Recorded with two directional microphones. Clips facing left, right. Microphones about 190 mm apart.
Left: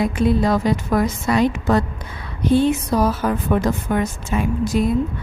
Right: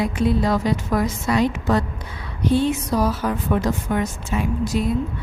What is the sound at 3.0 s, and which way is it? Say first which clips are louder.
A woman's voice: left 2 dB; 55° left (ahead or behind).